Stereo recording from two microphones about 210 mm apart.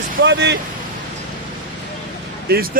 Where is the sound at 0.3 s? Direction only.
55° right (ahead or behind).